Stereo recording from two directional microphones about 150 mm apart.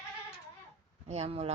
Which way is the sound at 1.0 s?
45° right (ahead or behind).